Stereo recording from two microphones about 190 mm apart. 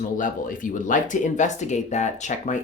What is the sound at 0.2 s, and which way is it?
Speech, 45° left (ahead or behind).